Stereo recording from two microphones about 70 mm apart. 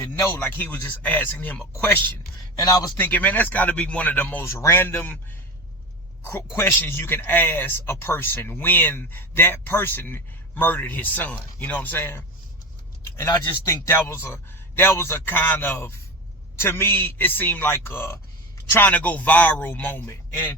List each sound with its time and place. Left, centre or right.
0.2 s speech: left
2.6 s speech: left
3.0 s speech: left
4.4 s a man's voice: left
6.6 s speech: left
13.8 s a man's voice: left
18.9 s speech: left